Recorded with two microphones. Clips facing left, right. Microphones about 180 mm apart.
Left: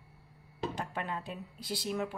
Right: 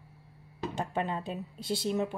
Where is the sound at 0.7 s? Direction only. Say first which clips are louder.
Right 8 dB; 25° right (ahead or behind).